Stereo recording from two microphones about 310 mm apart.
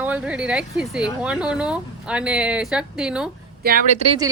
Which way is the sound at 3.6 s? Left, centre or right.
Right.